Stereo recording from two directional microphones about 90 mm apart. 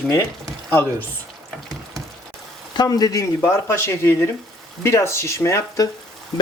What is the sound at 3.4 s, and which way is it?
Speech, 25° left (ahead or behind).